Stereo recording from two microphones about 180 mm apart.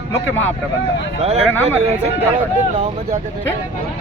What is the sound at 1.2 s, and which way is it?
Speech, 35° right (ahead or behind).